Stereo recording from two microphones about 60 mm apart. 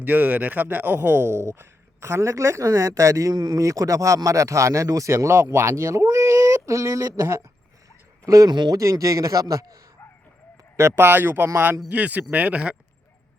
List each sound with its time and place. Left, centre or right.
0.0 s speech: right
5.1 s a man's voice: right
10.8 s speech: right
11.9 s speech: right